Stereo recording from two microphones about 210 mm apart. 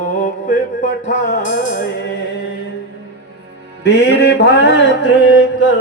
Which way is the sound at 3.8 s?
50° left (ahead or behind).